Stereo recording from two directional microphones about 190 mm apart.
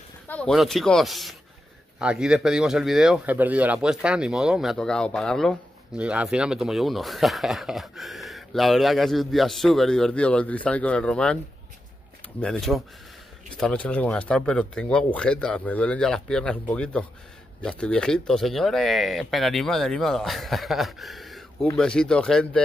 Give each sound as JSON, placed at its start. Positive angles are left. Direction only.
{"t": 0.3, "sound": "speech", "side_deg": 5}
{"t": 12.4, "sound": "speech", "side_deg": 5}